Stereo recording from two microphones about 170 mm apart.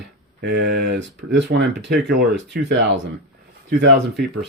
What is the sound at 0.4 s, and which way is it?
Speech, 80° right.